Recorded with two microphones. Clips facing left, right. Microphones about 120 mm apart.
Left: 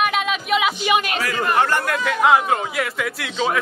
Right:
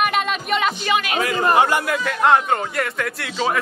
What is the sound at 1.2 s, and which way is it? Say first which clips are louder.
Speech: right 3 dB; 25° right (ahead or behind).